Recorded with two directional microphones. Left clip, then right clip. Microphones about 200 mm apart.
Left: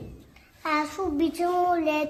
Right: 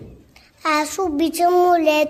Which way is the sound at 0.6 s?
50° right (ahead or behind).